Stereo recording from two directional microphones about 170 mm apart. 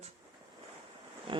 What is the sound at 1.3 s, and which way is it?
Speech, 30° right (ahead or behind).